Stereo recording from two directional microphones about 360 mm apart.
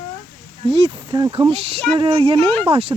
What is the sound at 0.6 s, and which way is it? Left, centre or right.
Speech, centre.